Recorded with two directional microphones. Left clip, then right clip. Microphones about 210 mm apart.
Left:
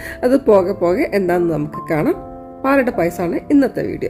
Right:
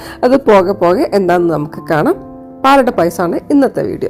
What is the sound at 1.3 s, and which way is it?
Speech, 20° right (ahead or behind).